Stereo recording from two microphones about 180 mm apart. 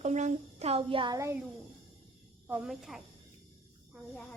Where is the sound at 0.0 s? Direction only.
40° right (ahead or behind); by 1.4 s 20° right (ahead or behind).